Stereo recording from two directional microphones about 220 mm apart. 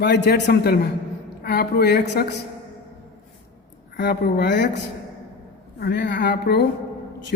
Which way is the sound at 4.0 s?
45° left (ahead or behind).